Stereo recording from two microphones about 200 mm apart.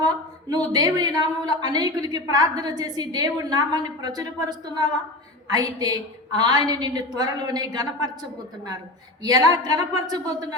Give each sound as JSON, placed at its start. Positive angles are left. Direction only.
{"t": 0.0, "sound": "a woman's voice", "side_deg": -20}